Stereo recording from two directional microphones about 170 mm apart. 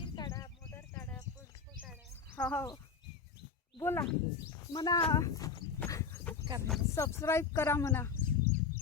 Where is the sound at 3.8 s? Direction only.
15° left (ahead or behind).